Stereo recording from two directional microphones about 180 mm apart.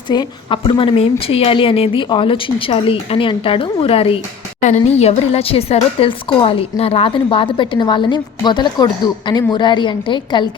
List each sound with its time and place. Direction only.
0.1 s a woman's voice: 25° left (ahead or behind)